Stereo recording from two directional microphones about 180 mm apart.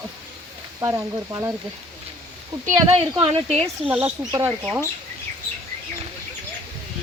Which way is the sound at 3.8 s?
10° right (ahead or behind).